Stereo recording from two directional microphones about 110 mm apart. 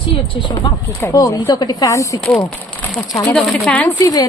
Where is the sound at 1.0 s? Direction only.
30° left (ahead or behind).